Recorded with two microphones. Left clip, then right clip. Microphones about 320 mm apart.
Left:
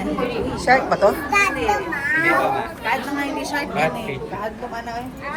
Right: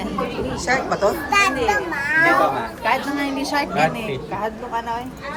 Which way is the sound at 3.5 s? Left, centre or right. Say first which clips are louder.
Right 3 dB; right.